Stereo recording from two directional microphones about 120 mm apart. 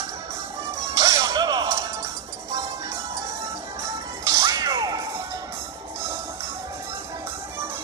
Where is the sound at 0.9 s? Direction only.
25° right (ahead or behind).